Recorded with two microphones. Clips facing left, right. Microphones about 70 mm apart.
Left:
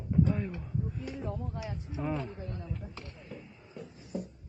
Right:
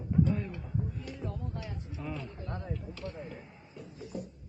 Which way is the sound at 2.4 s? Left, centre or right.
Right.